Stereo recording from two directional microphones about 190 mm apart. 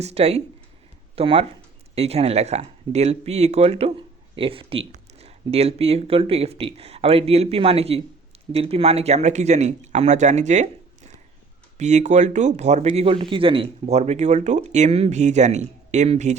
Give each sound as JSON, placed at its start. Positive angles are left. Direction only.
{"t": 0.0, "sound": "speech", "side_deg": -30}